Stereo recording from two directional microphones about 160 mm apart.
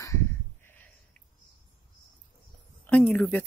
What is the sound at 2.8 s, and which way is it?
Speech, 10° left (ahead or behind).